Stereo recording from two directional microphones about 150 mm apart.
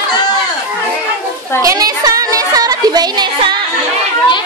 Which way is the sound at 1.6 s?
25° right (ahead or behind).